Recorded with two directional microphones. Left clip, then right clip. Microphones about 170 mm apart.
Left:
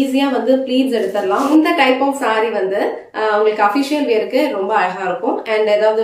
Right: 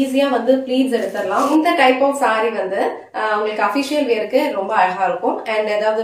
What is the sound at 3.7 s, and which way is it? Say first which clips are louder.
A woman's voice: left 2 dB; 20° left (ahead or behind).